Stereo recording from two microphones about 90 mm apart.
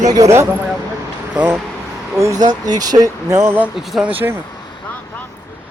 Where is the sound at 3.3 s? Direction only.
30° right (ahead or behind).